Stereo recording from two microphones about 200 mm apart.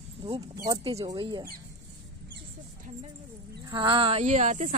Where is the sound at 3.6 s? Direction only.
25° right (ahead or behind); by 4.7 s 40° right (ahead or behind).